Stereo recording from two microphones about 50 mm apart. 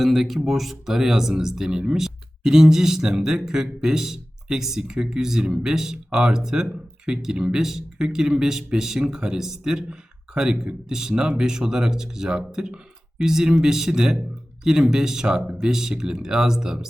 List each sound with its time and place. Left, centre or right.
0.0 s speech: centre
7.6 s speech: centre